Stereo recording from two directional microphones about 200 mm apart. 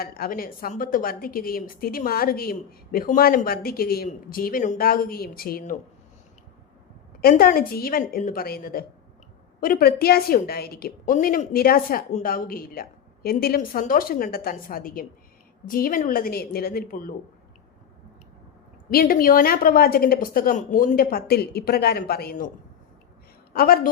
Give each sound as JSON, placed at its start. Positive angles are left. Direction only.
{"t": 0.0, "sound": "a woman's voice", "side_deg": 50}
{"t": 7.2, "sound": "a woman's voice", "side_deg": 50}
{"t": 18.9, "sound": "a woman's voice", "side_deg": 45}
{"t": 23.6, "sound": "a woman's voice", "side_deg": 45}